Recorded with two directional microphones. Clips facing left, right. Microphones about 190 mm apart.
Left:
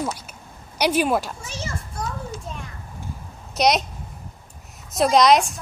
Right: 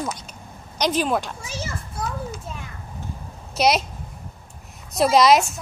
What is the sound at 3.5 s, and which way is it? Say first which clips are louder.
Speech: even; centre (ahead or behind).